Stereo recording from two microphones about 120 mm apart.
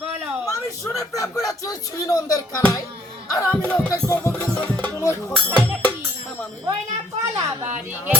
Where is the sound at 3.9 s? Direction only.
25° left (ahead or behind).